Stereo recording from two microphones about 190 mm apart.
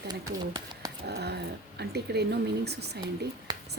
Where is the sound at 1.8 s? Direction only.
60° right (ahead or behind).